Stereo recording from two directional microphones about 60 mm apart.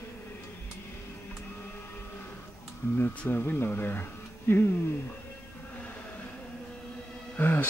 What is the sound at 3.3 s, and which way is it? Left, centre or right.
Speech, left.